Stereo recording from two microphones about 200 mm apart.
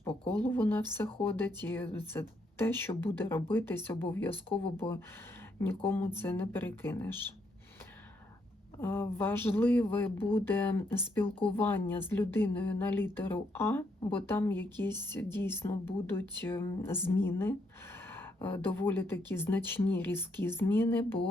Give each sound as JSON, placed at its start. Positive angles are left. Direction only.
{"t": 0.4, "sound": "speech", "side_deg": 10}
{"t": 5.5, "sound": "speech", "side_deg": 10}
{"t": 8.8, "sound": "speech", "side_deg": 10}
{"t": 11.3, "sound": "speech", "side_deg": 25}
{"t": 11.5, "sound": "speech", "side_deg": 10}